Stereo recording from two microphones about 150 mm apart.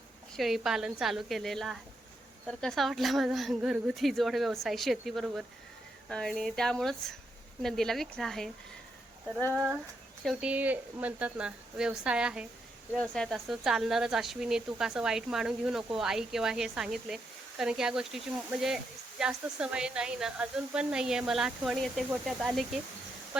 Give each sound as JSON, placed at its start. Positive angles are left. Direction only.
{"t": 0.3, "sound": "speech", "side_deg": 0}
{"t": 9.5, "sound": "a woman's voice", "side_deg": -15}
{"t": 13.0, "sound": "speech", "side_deg": 5}